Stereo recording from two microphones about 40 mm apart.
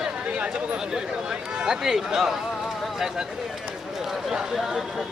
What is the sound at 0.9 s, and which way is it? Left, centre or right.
Speech, centre.